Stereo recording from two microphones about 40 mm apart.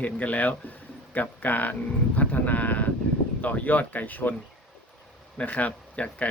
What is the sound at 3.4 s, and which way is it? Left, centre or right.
Speech, left.